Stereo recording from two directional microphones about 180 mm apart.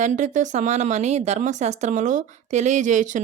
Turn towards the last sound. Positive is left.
turn(degrees=-45)  # may be behind; listen again after turning